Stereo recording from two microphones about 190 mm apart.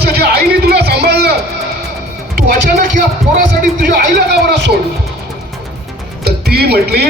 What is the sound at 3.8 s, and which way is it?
Speech, 55° right (ahead or behind).